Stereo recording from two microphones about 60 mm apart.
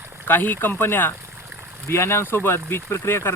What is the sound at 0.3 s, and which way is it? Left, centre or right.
Speech, left.